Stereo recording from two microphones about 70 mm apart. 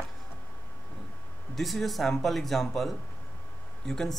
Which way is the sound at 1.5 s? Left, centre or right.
Centre.